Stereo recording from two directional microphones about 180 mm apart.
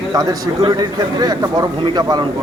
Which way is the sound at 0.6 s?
25° right (ahead or behind).